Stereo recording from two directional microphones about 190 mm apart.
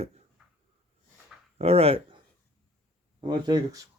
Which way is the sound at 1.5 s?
30° right (ahead or behind).